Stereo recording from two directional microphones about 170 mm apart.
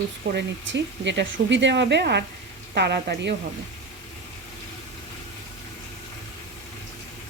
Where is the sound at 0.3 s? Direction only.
90° right.